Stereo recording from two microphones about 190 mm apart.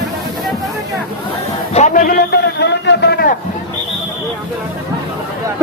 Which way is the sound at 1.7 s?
40° left (ahead or behind).